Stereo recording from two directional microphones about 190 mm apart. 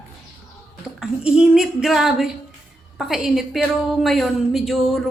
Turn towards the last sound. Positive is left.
turn(degrees=0)  # may be behind; listen again after turning